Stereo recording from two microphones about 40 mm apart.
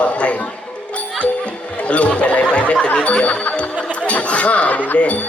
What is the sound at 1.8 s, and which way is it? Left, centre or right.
Speech, left.